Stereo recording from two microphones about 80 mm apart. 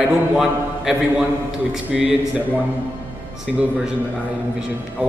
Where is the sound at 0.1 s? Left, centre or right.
Centre.